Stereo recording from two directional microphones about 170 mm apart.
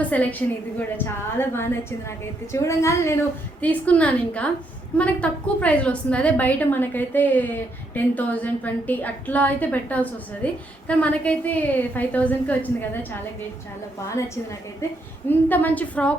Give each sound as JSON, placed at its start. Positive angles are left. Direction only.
{"t": 0.0, "sound": "a woman's voice", "side_deg": 10}
{"t": 15.3, "sound": "a woman's voice", "side_deg": 10}